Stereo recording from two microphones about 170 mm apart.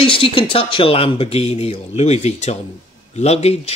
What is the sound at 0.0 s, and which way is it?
Speech, 30° left (ahead or behind).